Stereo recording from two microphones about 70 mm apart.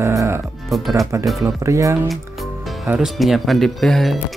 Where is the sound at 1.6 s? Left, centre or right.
Right.